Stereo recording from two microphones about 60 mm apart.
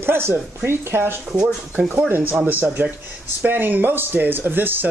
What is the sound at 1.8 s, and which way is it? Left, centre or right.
Speech, right.